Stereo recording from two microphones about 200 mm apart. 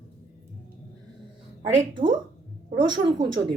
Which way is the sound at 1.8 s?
25° right (ahead or behind).